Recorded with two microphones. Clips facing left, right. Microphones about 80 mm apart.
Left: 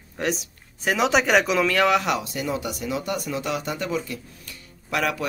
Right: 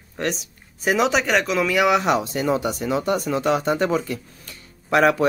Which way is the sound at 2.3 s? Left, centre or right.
Right.